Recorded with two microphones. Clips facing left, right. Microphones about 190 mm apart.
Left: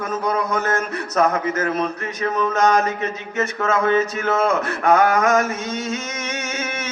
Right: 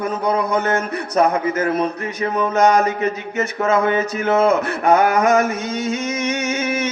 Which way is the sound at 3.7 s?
25° right (ahead or behind).